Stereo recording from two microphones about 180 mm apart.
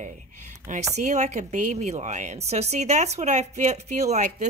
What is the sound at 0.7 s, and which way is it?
Speech, 45° right (ahead or behind).